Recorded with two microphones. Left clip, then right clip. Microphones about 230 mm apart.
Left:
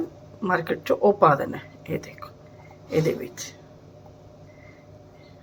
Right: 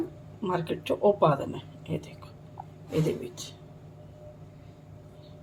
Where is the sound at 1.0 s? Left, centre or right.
Centre.